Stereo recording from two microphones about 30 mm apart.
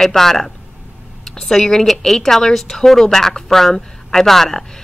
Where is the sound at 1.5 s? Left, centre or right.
Centre.